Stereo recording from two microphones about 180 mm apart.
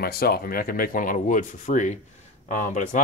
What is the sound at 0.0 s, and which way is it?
Speech, 60° left (ahead or behind).